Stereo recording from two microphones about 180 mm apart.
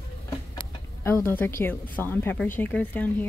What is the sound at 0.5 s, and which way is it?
Speech, 15° left (ahead or behind).